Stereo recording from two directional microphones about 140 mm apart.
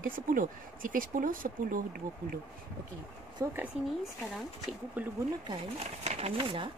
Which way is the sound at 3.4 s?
20° right (ahead or behind).